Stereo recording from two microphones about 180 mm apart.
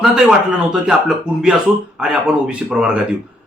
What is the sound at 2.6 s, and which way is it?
Speech, 5° right (ahead or behind).